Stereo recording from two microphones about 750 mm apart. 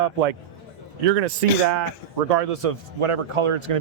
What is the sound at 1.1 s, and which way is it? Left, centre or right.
A man's voice, right.